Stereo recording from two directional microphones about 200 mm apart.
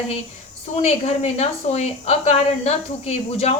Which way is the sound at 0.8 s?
30° left (ahead or behind).